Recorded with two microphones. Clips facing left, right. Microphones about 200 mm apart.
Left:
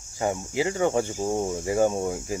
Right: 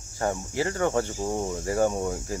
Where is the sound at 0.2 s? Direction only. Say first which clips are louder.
Left 2 dB; 15° left (ahead or behind).